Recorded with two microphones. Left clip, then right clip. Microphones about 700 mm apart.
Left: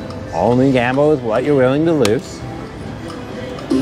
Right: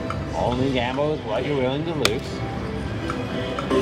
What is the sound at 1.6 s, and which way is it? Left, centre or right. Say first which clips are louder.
Speech: left 11 dB; left.